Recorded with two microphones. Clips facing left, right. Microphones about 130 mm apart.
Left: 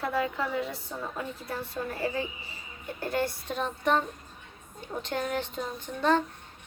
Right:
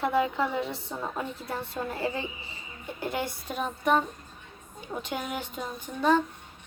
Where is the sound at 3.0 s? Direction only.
20° right (ahead or behind).